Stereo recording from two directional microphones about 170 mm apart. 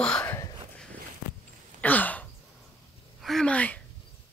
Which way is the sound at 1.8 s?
10° left (ahead or behind).